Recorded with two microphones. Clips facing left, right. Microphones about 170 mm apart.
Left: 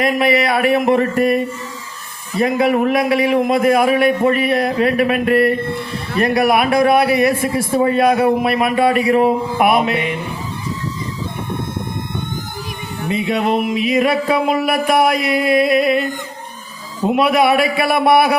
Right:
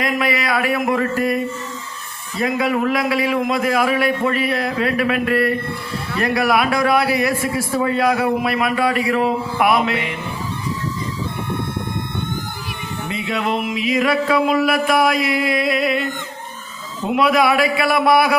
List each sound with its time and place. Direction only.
0.0 s a man's voice: 25° left (ahead or behind)
2.4 s a man's voice: 25° left (ahead or behind)
13.1 s a man's voice: 20° left (ahead or behind)
17.2 s a man's voice: 25° left (ahead or behind)